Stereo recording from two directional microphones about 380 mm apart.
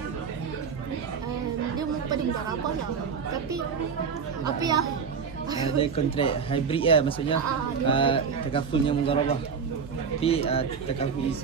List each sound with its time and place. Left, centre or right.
5.6 s speech: centre